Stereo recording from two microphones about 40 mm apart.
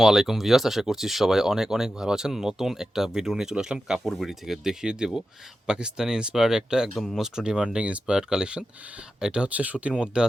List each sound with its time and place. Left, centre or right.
0.0 s speech: centre
4.0 s speech: centre; by 9.5 s right
9.5 s speech: right
10.2 s speech: right